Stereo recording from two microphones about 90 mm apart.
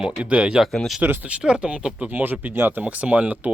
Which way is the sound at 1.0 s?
20° right (ahead or behind).